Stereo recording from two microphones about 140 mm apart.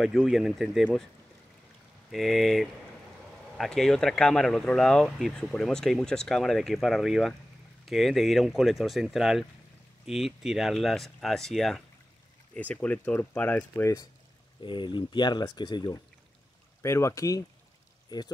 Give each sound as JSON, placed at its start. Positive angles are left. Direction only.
{"t": 0.0, "sound": "speech", "side_deg": 0}
{"t": 2.0, "sound": "speech", "side_deg": 0}
{"t": 14.6, "sound": "speech", "side_deg": 35}
{"t": 16.8, "sound": "speech", "side_deg": 20}